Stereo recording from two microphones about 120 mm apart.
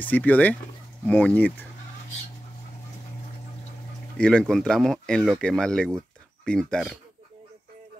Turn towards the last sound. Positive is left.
turn(degrees=5)  # may be behind; listen again after turning